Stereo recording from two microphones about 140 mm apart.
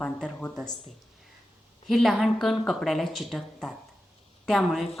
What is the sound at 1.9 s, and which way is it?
A woman's voice, centre (ahead or behind).